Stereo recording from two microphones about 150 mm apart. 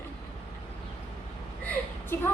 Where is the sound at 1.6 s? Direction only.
15° left (ahead or behind).